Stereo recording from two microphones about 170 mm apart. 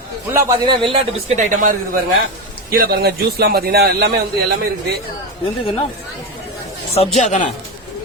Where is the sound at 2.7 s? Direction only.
65° right (ahead or behind).